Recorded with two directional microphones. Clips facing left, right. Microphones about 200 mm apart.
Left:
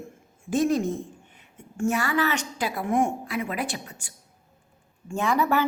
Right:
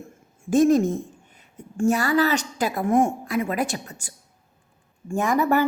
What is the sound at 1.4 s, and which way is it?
A woman's voice, 35° right (ahead or behind).